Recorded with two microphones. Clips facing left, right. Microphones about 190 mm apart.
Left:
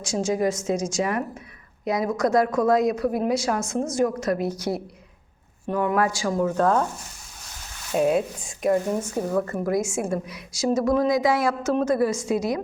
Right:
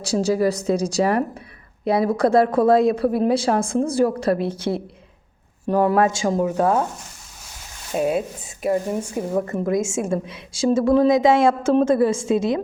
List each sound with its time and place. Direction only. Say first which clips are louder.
0.0 s a woman's voice: right 4 dB; 35° right (ahead or behind); by 6.8 s 10° right (ahead or behind)
7.9 s speech: even; centre (ahead or behind)
9.2 s a woman's voice: right 2 dB; 25° right (ahead or behind)